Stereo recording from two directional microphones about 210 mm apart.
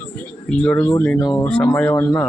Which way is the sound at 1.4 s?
5° left (ahead or behind).